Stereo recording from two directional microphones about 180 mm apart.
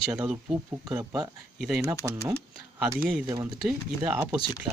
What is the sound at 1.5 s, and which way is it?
Speech, centre (ahead or behind).